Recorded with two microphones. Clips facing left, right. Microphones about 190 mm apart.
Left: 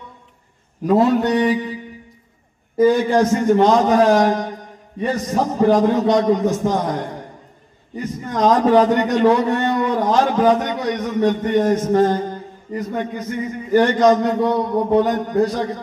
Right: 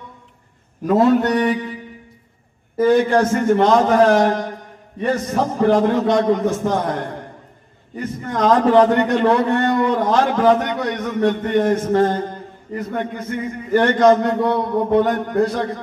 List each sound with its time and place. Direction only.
0.8 s mantra: 20° left (ahead or behind)
2.8 s a man's voice: 15° left (ahead or behind)
8.2 s a man's voice: 15° left (ahead or behind)